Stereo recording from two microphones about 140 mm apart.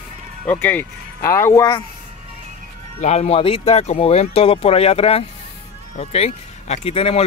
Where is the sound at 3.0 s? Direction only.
50° left (ahead or behind).